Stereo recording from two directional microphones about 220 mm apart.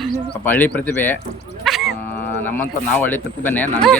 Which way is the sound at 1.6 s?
Centre (ahead or behind).